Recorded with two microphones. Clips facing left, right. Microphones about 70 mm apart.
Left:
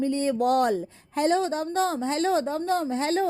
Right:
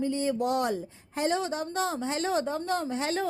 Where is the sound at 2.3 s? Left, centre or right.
Left.